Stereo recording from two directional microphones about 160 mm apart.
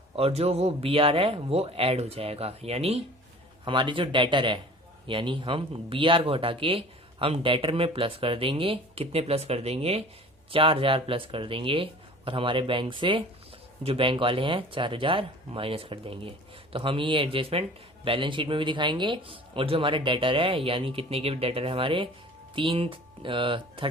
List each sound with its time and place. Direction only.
0.2 s speech: 40° right (ahead or behind)